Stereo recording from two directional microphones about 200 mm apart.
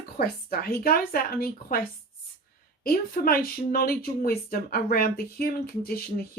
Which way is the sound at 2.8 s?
45° left (ahead or behind).